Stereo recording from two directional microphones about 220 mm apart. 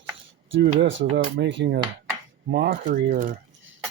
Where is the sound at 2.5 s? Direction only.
45° right (ahead or behind).